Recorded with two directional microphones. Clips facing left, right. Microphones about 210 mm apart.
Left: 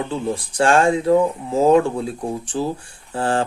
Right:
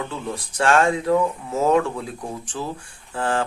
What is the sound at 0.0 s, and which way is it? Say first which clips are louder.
Speech: left 6 dB; 30° left (ahead or behind).